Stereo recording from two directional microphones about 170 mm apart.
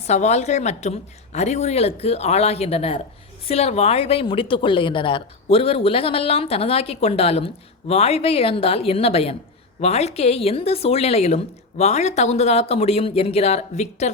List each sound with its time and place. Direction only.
0.1 s speech: 40° left (ahead or behind)